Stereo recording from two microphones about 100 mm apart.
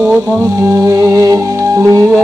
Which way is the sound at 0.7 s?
30° right (ahead or behind).